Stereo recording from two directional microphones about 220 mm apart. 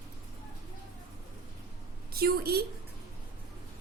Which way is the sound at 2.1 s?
45° right (ahead or behind).